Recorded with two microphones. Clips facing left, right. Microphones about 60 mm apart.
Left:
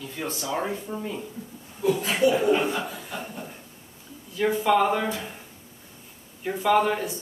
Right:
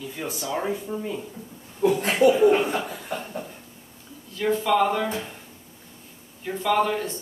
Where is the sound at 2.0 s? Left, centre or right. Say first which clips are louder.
Right 6 dB; right.